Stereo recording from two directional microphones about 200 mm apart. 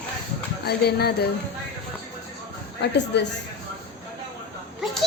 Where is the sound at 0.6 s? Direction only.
55° left (ahead or behind).